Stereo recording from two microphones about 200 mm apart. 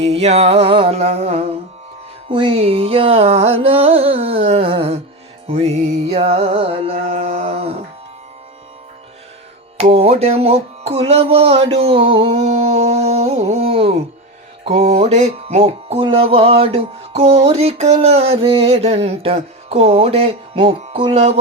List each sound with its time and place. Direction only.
0.0 s music: 30° right (ahead or behind)
9.7 s music: 30° right (ahead or behind)